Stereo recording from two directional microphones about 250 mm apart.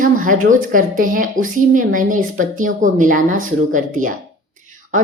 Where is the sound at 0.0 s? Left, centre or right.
Right.